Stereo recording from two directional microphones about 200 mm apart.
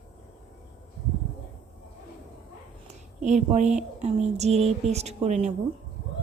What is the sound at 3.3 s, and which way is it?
Speech, 35° right (ahead or behind).